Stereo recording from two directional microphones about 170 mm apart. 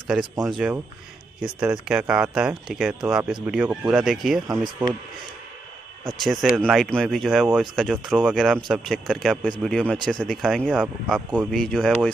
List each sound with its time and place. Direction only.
0.0 s speech: 5° right (ahead or behind)
6.0 s speech: centre (ahead or behind)